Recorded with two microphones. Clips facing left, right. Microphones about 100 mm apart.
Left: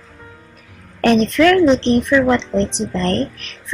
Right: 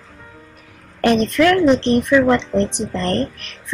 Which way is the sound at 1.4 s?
10° right (ahead or behind).